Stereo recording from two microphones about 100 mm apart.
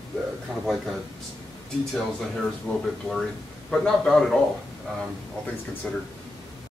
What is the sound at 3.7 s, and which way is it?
Speech, 5° left (ahead or behind).